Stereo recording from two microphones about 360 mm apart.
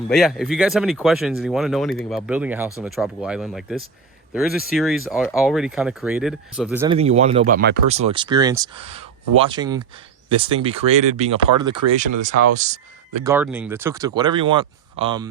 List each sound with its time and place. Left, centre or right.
0.1 s speech: centre
13.3 s speech: centre